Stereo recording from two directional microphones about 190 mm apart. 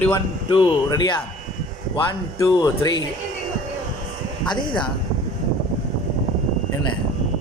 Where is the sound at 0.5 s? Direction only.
25° left (ahead or behind).